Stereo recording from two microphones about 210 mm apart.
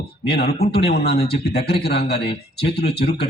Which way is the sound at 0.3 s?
50° left (ahead or behind).